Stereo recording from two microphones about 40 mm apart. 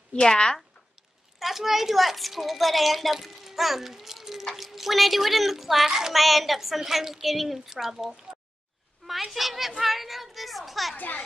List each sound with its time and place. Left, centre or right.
0.1 s speech: centre
1.4 s speech: centre
9.0 s speech: centre